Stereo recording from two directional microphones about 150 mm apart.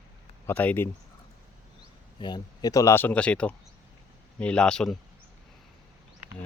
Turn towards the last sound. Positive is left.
turn(degrees=5)  # may be behind; listen again after turning